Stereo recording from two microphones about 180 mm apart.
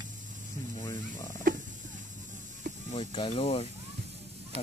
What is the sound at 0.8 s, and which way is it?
Speech, 20° left (ahead or behind).